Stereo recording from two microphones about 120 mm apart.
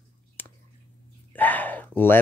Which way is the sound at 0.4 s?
15° left (ahead or behind).